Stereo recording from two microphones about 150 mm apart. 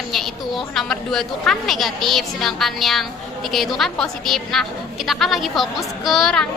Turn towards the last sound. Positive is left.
turn(degrees=0)  # may be behind; listen again after turning